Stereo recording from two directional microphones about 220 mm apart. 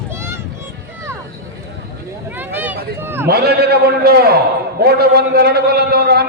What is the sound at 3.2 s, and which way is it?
A man's voice, 45° right (ahead or behind).